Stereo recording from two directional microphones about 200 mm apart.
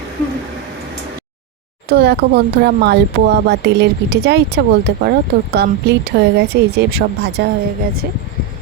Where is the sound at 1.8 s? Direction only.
55° right (ahead or behind).